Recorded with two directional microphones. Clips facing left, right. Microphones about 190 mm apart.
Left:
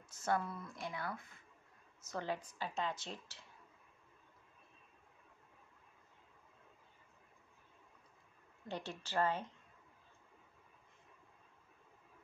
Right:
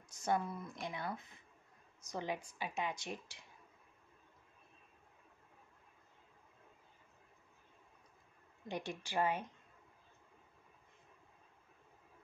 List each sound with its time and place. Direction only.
0.1 s speech: 15° right (ahead or behind)
8.6 s speech: 15° right (ahead or behind)